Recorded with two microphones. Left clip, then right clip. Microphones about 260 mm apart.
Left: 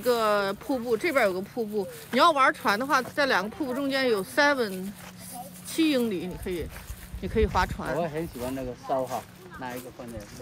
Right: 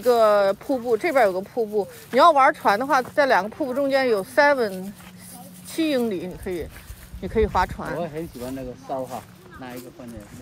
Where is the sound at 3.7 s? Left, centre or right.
Centre.